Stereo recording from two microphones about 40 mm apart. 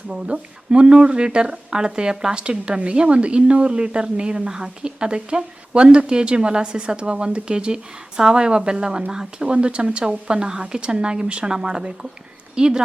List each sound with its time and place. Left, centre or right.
0.1 s a woman's voice: right